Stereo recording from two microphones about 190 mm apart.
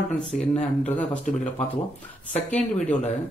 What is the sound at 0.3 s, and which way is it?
Speech, 5° left (ahead or behind).